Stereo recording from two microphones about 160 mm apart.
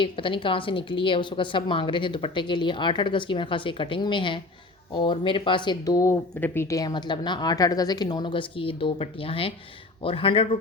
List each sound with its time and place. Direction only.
0.0 s a woman's voice: 30° left (ahead or behind)